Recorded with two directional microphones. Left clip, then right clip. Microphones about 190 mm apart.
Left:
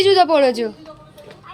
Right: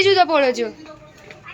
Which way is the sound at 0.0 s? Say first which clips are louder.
Left 2 dB; 20° left (ahead or behind).